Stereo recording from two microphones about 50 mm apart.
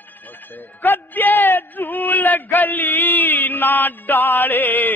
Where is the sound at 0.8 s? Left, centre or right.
Left.